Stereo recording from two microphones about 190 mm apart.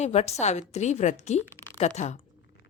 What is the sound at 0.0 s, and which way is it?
A woman's voice, 35° left (ahead or behind).